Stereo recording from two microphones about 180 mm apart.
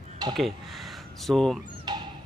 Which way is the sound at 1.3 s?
5° left (ahead or behind).